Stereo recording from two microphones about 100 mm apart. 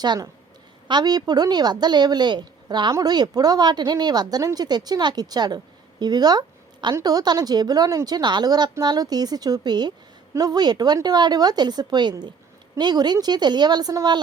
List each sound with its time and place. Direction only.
0.9 s speech: 45° right (ahead or behind)